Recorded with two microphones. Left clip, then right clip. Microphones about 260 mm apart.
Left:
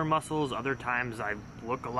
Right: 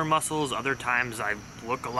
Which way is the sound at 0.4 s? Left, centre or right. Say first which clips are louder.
Right 3 dB; centre.